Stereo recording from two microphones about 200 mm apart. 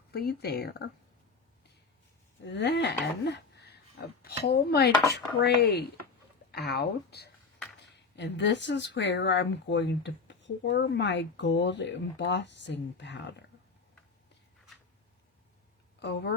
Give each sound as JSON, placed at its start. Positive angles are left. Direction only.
{"t": 0.1, "sound": "dishes", "side_deg": 50}
{"t": 2.4, "sound": "speech", "side_deg": 60}
{"t": 4.2, "sound": "dishes", "side_deg": 50}
{"t": 6.5, "sound": "speech", "side_deg": 55}
{"t": 16.0, "sound": "speech", "side_deg": 55}